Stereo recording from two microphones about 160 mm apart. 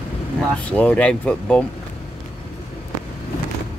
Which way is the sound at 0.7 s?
10° left (ahead or behind).